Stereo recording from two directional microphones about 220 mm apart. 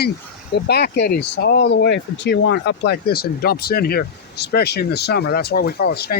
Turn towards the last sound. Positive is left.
turn(degrees=45)  # may be behind; listen again after turning